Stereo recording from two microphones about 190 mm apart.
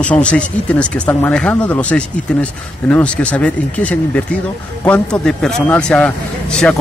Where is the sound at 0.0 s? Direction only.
5° left (ahead or behind).